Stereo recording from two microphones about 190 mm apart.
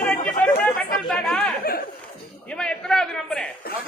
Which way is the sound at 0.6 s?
5° left (ahead or behind).